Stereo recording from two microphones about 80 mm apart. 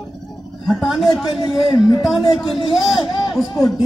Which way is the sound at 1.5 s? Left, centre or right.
Left.